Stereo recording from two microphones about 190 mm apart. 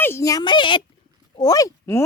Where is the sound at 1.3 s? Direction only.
20° left (ahead or behind).